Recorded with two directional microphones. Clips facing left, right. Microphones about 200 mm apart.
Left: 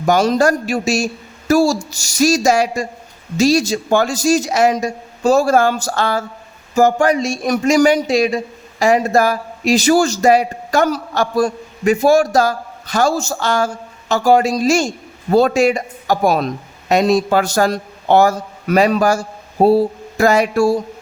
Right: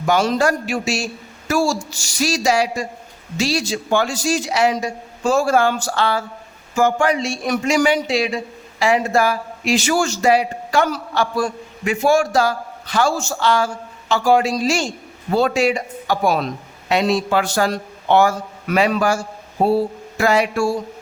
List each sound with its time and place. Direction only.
0.0 s a man's voice: 40° left (ahead or behind)